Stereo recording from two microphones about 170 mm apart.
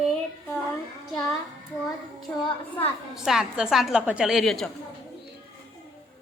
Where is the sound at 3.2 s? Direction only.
5° right (ahead or behind).